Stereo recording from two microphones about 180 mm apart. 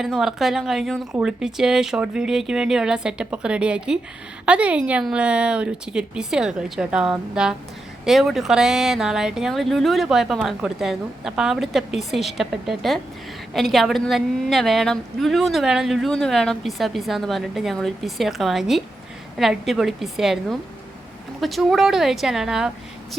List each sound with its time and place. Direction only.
0.0 s a woman's voice: centre (ahead or behind)